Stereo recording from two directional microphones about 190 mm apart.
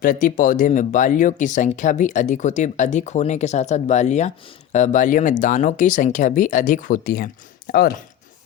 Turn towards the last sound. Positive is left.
turn(degrees=50)  # may be behind; listen again after turning